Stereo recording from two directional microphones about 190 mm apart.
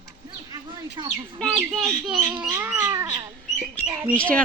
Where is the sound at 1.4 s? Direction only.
5° left (ahead or behind); by 3.2 s 15° right (ahead or behind).